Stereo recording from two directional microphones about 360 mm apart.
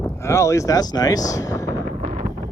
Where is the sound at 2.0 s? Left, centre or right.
Right.